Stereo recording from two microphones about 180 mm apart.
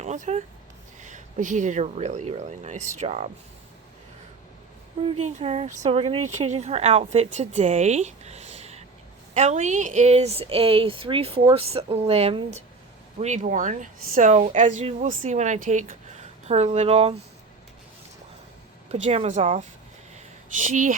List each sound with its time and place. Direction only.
0.0 s speech: 40° right (ahead or behind)
5.0 s speech: 35° right (ahead or behind)
18.9 s speech: 35° right (ahead or behind)
20.1 s a sound: 45° right (ahead or behind)